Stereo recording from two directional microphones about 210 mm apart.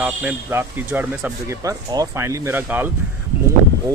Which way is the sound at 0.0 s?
10° right (ahead or behind).